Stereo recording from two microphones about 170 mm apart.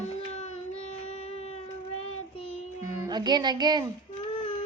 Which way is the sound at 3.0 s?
25° right (ahead or behind).